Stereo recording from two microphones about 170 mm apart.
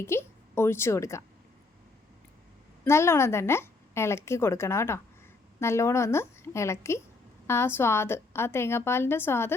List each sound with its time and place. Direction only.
0.0 s a woman's voice: 15° left (ahead or behind)
2.8 s a woman's voice: 15° left (ahead or behind)